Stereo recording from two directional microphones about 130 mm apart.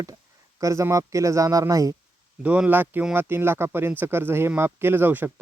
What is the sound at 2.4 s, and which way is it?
Speech, 10° right (ahead or behind).